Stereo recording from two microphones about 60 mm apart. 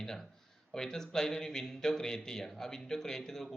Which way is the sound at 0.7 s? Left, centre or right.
Centre.